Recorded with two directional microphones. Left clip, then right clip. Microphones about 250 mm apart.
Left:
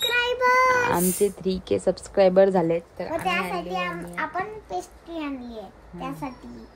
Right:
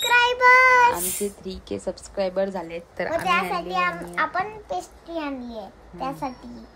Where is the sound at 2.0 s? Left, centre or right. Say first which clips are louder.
Left 8 dB; left.